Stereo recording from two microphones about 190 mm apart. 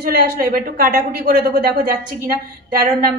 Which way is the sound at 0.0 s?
50° right (ahead or behind).